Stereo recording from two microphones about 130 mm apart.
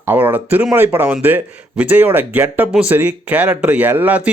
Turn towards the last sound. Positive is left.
turn(degrees=-10)  # may be behind; listen again after turning